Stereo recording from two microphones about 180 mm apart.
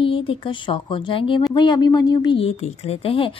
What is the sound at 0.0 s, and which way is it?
A woman's voice, 30° left (ahead or behind).